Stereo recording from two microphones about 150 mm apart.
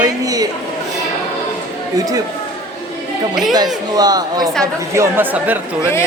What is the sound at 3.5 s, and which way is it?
A woman's voice, 25° right (ahead or behind).